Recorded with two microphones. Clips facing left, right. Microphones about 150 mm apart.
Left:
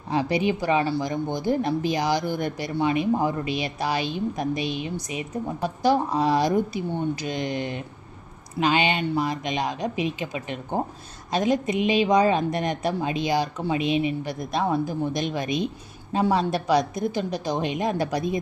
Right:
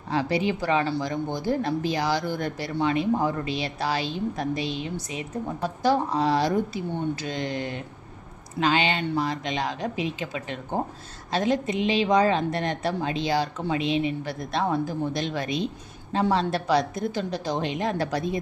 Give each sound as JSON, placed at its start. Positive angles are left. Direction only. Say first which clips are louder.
{"t": 0.1, "sound": "speech", "louder": "left 2 dB", "side_deg": 15}